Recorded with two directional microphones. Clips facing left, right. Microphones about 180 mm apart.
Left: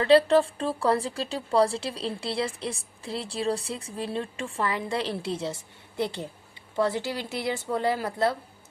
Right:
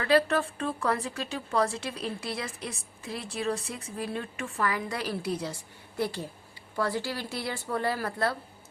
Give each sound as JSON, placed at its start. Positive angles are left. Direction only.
{"t": 0.0, "sound": "a woman's voice", "side_deg": 30}